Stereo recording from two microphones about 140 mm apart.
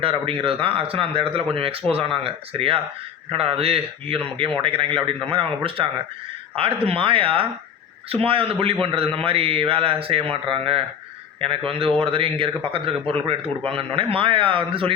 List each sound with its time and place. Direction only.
0.0 s a man's voice: 40° right (ahead or behind)